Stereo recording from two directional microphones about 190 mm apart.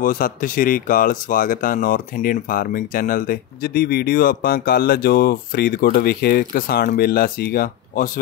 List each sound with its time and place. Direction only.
0.0 s speech: 45° left (ahead or behind)